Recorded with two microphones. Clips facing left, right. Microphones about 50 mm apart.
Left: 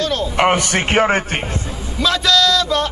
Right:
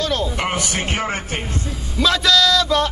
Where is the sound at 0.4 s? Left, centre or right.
Left.